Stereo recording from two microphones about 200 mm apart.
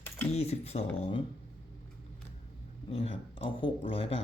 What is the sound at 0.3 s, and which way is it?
Speech, 30° left (ahead or behind).